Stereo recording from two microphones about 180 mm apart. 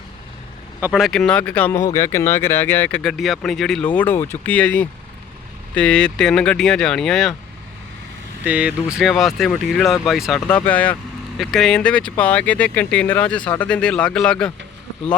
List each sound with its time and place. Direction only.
0.9 s speech: centre (ahead or behind)
8.4 s speech: 5° right (ahead or behind)